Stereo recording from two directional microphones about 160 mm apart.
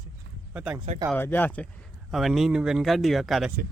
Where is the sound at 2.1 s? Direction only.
Centre (ahead or behind).